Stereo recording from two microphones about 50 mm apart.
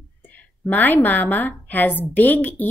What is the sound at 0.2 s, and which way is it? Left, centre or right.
A woman's voice, left.